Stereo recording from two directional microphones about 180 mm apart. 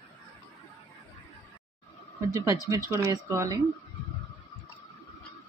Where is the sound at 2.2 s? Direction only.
15° right (ahead or behind).